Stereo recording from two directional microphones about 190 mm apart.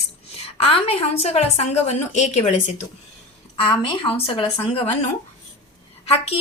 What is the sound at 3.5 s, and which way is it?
A woman's voice, 25° left (ahead or behind).